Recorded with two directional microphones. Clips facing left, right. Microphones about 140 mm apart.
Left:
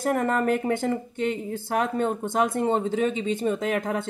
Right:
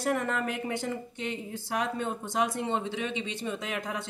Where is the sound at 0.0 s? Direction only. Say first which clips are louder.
Left 6 dB; 50° left (ahead or behind).